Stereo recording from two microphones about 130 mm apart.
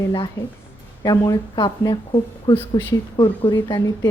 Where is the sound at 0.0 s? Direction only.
30° left (ahead or behind).